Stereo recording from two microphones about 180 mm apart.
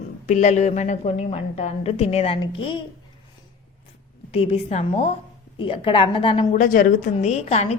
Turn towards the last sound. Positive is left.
turn(degrees=35)  # may be behind; listen again after turning